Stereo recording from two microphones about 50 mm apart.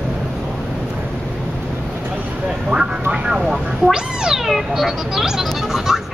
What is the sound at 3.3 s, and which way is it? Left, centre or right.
Vehicle, centre.